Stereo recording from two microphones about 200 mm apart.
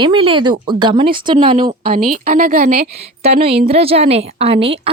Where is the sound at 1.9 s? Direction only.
45° right (ahead or behind).